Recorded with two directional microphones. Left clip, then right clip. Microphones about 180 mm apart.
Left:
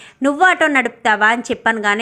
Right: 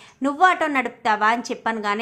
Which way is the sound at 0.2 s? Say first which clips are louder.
Left 5 dB; 15° left (ahead or behind).